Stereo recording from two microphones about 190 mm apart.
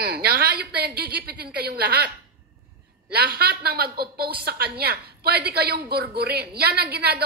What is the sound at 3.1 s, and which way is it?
A woman's voice, 55° right (ahead or behind).